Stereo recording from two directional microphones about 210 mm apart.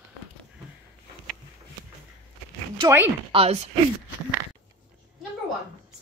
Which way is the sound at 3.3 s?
30° right (ahead or behind).